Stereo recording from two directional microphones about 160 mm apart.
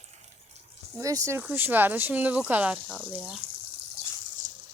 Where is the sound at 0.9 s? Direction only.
20° right (ahead or behind); by 3.4 s centre (ahead or behind).